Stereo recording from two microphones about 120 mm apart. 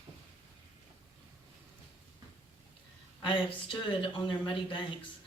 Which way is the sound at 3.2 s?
45° left (ahead or behind).